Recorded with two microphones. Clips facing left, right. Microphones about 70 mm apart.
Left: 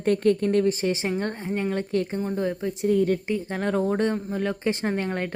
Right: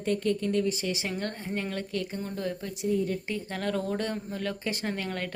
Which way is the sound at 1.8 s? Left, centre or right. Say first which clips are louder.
Left 7 dB; left.